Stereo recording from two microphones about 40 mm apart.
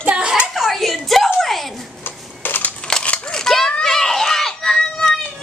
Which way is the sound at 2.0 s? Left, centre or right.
Left.